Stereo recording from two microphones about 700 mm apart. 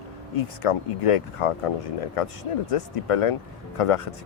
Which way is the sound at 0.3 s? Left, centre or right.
Left.